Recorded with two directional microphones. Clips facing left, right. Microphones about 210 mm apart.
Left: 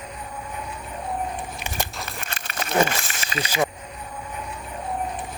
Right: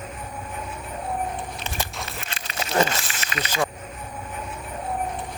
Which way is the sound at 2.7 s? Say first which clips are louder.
Left 1 dB; 10° left (ahead or behind).